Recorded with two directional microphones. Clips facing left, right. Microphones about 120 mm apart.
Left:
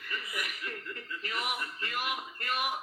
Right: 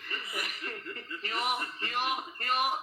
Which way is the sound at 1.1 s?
30° right (ahead or behind).